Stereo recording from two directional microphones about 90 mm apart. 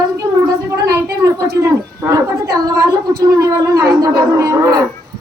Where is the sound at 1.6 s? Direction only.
35° right (ahead or behind).